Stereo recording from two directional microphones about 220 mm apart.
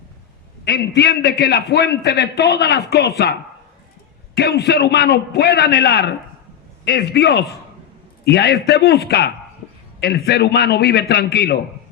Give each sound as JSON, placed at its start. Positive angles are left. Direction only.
{"t": 0.6, "sound": "a man's voice", "side_deg": 45}
{"t": 4.4, "sound": "a man's voice", "side_deg": 50}